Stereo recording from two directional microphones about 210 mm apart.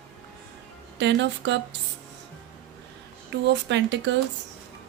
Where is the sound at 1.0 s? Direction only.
55° right (ahead or behind).